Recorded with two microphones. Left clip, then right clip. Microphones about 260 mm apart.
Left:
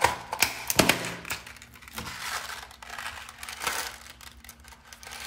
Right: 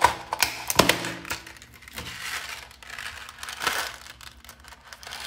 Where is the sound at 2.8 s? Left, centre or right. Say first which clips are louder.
Right 1 dB; centre.